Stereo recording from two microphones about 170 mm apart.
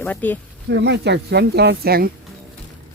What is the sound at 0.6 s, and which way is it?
Speech, 80° right.